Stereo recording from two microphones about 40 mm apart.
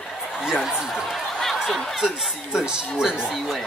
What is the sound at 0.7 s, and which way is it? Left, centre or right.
Speech, centre.